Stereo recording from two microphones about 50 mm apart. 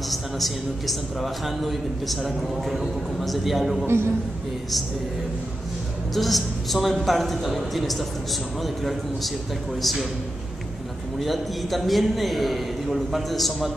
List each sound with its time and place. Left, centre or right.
0.1 s a man's voice: centre
3.8 s a man's voice: right
6.1 s a man's voice: centre
11.1 s a man's voice: centre